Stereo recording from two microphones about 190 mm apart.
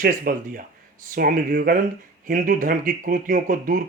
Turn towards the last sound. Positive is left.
turn(degrees=-45)  # may be behind; listen again after turning